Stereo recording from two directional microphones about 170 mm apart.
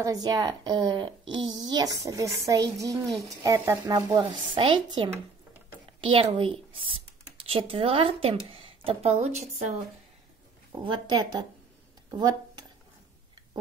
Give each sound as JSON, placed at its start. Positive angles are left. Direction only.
{"t": 0.0, "sound": "a woman's voice", "side_deg": -20}
{"t": 4.2, "sound": "a woman's voice", "side_deg": -30}
{"t": 10.7, "sound": "a woman's voice", "side_deg": -25}